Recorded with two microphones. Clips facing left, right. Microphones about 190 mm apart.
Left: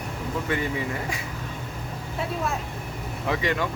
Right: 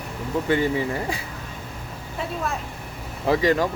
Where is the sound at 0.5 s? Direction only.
30° right (ahead or behind).